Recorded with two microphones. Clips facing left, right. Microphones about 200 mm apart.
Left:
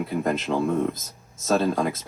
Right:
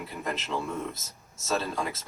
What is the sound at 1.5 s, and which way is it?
Speech, 45° left (ahead or behind).